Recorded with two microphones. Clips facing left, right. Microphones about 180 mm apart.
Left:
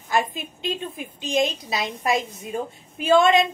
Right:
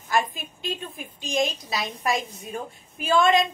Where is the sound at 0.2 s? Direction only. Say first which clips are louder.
Left 3 dB; 20° left (ahead or behind).